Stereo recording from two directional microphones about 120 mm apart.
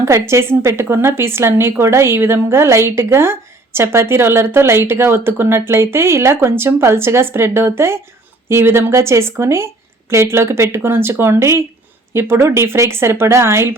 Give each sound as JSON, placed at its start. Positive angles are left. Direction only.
{"t": 0.0, "sound": "a woman's voice", "side_deg": -25}